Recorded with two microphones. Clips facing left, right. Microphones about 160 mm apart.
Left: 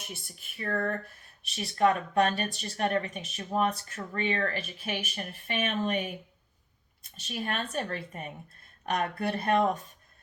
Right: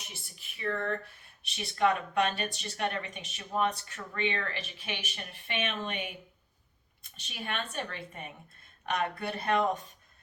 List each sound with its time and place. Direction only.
0.1 s speech: 45° left (ahead or behind)
7.3 s speech: 40° left (ahead or behind)